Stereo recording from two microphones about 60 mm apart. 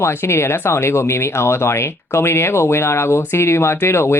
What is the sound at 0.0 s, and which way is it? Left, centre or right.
Speech, left.